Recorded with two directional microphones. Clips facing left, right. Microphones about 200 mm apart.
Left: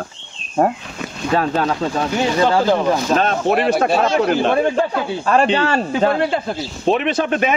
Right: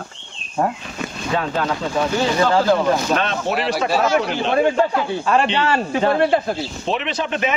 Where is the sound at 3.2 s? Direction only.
50° left (ahead or behind).